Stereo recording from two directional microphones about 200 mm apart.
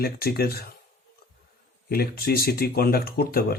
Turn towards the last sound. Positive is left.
turn(degrees=50)  # may be behind; listen again after turning